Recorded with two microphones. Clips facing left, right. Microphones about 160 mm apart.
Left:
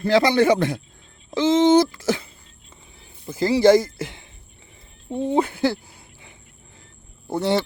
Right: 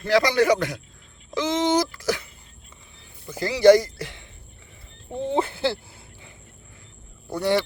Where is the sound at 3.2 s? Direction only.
25° left (ahead or behind).